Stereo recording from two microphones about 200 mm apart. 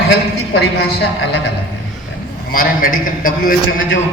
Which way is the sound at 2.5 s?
45° left (ahead or behind).